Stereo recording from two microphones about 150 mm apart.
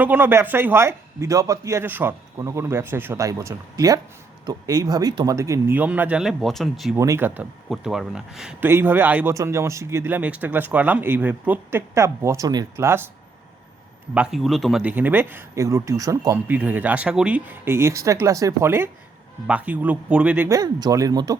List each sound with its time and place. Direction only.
0.0 s a man's voice: 10° right (ahead or behind)
6.9 s a man's voice: 20° right (ahead or behind)
7.7 s speech: 5° right (ahead or behind)
8.6 s a man's voice: 15° right (ahead or behind)
14.1 s speech: 5° right (ahead or behind)
14.8 s a man's voice: 10° right (ahead or behind)
16.5 s a man's voice: 10° right (ahead or behind)
20.5 s speech: 25° right (ahead or behind)